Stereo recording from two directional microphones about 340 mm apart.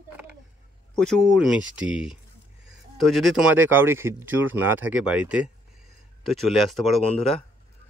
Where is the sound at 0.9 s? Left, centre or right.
Centre.